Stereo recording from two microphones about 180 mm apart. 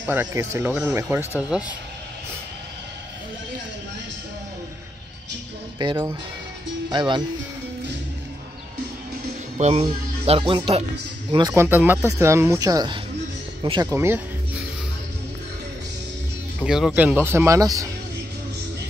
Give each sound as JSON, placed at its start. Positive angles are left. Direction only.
{"t": 0.0, "sound": "speech", "side_deg": -10}
{"t": 5.8, "sound": "speech", "side_deg": -25}
{"t": 9.6, "sound": "speech", "side_deg": -35}
{"t": 11.3, "sound": "speech", "side_deg": -20}
{"t": 16.5, "sound": "speech", "side_deg": -5}